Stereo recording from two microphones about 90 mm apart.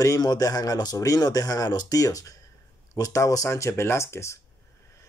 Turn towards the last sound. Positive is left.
turn(degrees=30)  # may be behind; listen again after turning